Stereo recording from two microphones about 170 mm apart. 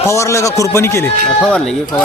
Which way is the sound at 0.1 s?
15° left (ahead or behind).